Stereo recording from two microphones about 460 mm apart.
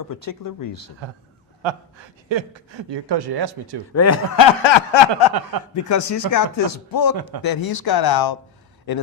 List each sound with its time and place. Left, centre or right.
0.1 s speech: left
1.6 s speech: right
3.9 s speech: left
4.6 s a sound: left
5.3 s speech: right
5.9 s speech: left